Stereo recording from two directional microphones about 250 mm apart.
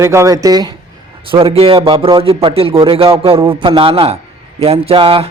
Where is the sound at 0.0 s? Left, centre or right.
Centre.